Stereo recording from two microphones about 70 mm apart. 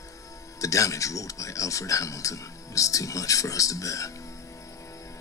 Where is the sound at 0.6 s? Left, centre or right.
Left.